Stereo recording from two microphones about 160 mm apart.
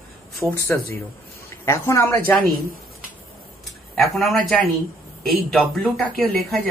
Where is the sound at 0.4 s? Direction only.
10° right (ahead or behind).